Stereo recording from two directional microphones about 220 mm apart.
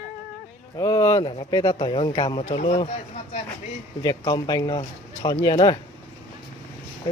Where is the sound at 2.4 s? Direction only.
30° left (ahead or behind).